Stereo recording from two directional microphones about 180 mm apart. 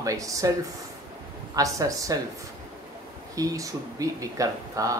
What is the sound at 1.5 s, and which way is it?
Speech, 20° right (ahead or behind).